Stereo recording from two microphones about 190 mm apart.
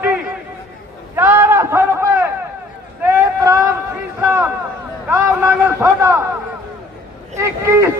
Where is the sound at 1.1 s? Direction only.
15° right (ahead or behind).